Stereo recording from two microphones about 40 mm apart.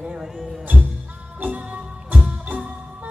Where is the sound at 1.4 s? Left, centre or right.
Right.